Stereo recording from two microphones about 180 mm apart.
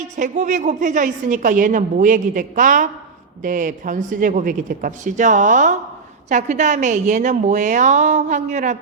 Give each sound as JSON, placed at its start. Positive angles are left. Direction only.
{"t": 0.2, "sound": "a woman's voice", "side_deg": -45}